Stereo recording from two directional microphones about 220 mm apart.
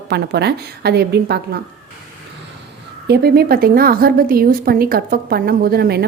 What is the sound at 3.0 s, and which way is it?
A woman's voice, 45° right (ahead or behind).